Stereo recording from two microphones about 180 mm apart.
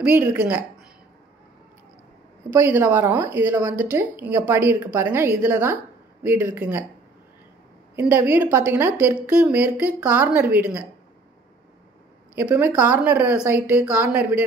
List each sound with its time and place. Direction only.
0.0 s a woman's voice: 5° right (ahead or behind)
2.5 s a woman's voice: 10° right (ahead or behind)
7.9 s a woman's voice: 10° right (ahead or behind)
12.4 s a woman's voice: 10° right (ahead or behind)